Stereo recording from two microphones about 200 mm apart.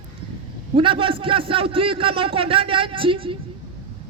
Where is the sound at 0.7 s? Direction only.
25° right (ahead or behind).